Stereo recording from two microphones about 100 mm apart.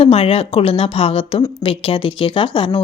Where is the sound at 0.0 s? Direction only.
80° left.